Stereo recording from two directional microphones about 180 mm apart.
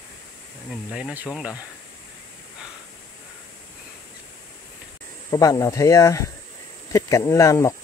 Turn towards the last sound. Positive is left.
turn(degrees=15)  # may be behind; listen again after turning